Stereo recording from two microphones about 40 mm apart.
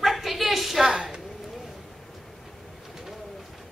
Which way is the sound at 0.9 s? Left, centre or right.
Centre.